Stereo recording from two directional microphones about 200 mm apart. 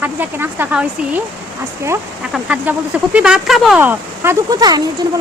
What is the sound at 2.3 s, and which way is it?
Speech, 5° right (ahead or behind).